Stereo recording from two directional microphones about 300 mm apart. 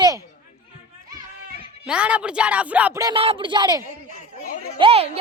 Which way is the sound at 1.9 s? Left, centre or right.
Centre.